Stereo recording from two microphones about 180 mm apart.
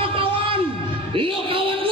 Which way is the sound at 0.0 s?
30° right (ahead or behind).